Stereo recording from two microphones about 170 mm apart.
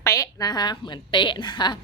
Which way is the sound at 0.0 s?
20° left (ahead or behind).